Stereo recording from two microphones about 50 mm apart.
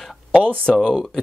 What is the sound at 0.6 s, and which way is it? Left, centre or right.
Speech, centre.